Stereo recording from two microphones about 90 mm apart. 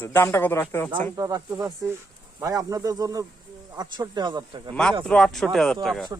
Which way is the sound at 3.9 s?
55° right (ahead or behind).